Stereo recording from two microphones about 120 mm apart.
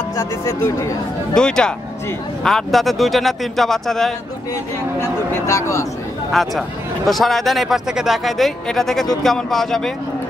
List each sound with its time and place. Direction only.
0.2 s speech: 25° left (ahead or behind)
1.3 s speech: 5° left (ahead or behind)
5.3 s speech: 25° left (ahead or behind)
6.4 s speech: centre (ahead or behind)